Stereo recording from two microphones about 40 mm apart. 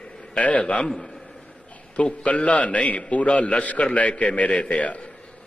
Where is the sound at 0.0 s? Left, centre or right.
Left.